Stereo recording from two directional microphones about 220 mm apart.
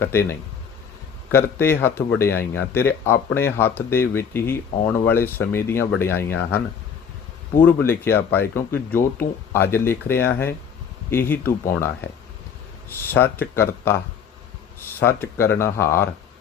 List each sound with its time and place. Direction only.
0.0 s speech: 10° left (ahead or behind)
2.3 s speech: 45° left (ahead or behind)
2.6 s speech: 10° left (ahead or behind)
7.6 s speech: 10° left (ahead or behind)
13.0 s speech: 10° left (ahead or behind)